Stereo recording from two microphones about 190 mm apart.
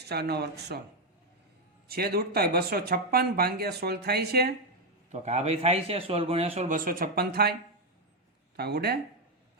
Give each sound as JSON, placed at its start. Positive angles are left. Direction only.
{"t": 0.0, "sound": "speech", "side_deg": -60}
{"t": 1.9, "sound": "speech", "side_deg": -55}
{"t": 5.1, "sound": "a man's voice", "side_deg": -35}
{"t": 8.5, "sound": "speech", "side_deg": -60}